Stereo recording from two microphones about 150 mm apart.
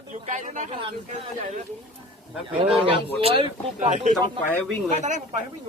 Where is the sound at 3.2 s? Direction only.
35° right (ahead or behind).